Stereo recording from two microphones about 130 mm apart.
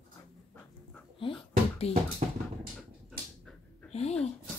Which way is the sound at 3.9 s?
55° left (ahead or behind).